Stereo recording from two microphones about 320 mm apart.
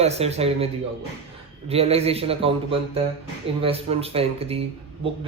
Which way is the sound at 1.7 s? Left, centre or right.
Centre.